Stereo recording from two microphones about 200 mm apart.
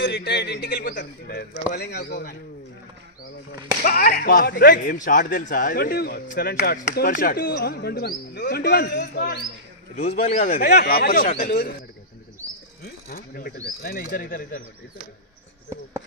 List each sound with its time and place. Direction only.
0.0 s a man's voice: 60° left (ahead or behind)
3.8 s a man's voice: 45° left (ahead or behind)
9.9 s a man's voice: 35° left (ahead or behind)
12.8 s a man's voice: 45° left (ahead or behind)